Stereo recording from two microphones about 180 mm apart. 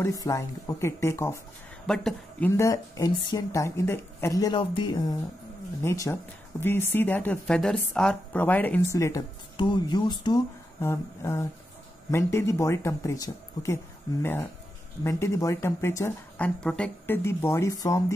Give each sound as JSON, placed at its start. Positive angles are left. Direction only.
{"t": 0.0, "sound": "a woman's voice", "side_deg": 20}
{"t": 1.9, "sound": "speech", "side_deg": 5}
{"t": 2.5, "sound": "a woman's voice", "side_deg": 15}